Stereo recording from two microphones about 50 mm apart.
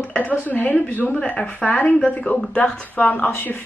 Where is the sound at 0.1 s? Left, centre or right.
Left.